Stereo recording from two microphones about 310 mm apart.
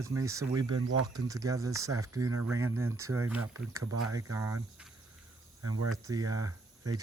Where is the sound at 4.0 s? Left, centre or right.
Right.